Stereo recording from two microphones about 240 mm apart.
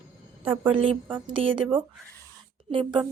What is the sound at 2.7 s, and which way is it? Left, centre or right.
Speech, right.